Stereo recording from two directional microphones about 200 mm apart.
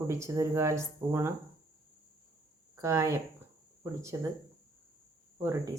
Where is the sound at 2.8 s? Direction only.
15° right (ahead or behind).